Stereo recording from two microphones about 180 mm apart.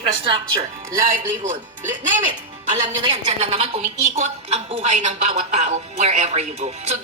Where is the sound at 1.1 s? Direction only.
45° right (ahead or behind).